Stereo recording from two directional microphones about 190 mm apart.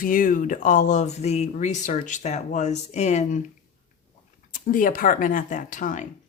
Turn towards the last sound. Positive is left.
turn(degrees=40)  # may be behind; listen again after turning